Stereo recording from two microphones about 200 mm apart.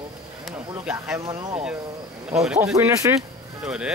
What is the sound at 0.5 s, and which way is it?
Speech, 5° right (ahead or behind).